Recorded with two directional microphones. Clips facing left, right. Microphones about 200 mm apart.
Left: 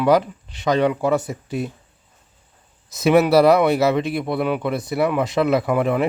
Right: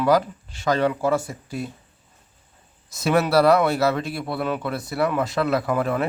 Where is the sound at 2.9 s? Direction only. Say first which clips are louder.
Left 5 dB; 20° left (ahead or behind).